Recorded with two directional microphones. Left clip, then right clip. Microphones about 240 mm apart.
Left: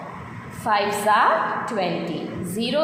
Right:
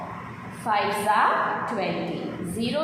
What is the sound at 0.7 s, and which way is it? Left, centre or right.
Speech, left.